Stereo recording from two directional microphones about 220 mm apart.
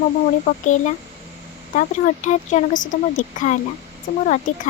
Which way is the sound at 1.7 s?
35° left (ahead or behind).